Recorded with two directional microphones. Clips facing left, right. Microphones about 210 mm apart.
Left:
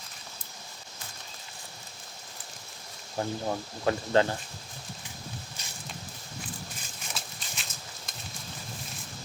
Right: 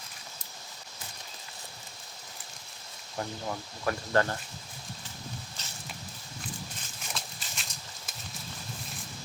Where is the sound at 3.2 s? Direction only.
25° left (ahead or behind).